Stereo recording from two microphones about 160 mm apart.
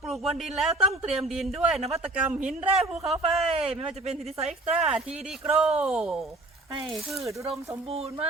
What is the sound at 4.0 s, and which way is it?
Speech, 40° right (ahead or behind).